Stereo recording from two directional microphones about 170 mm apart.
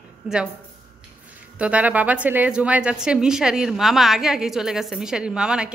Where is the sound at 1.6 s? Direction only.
10° right (ahead or behind).